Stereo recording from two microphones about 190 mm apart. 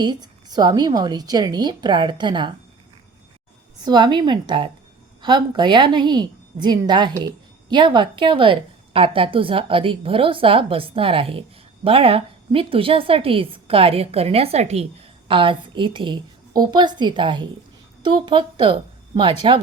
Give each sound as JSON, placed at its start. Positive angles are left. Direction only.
{"t": 0.0, "sound": "a woman's voice", "side_deg": -20}
{"t": 3.8, "sound": "a woman's voice", "side_deg": -20}